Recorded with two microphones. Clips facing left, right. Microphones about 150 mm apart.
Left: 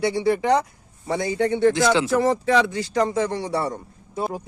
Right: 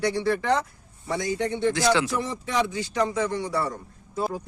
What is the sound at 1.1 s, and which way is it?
Speech, 30° left (ahead or behind).